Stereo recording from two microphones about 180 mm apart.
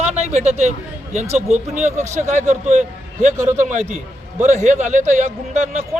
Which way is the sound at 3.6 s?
40° right (ahead or behind).